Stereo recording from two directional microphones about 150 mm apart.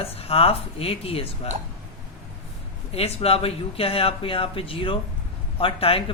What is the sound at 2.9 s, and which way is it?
Speech, 40° left (ahead or behind).